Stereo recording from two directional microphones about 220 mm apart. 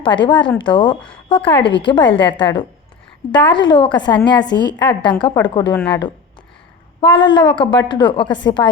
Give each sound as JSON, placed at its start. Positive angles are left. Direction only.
{"t": 0.0, "sound": "speech", "side_deg": 20}
{"t": 7.0, "sound": "speech", "side_deg": 20}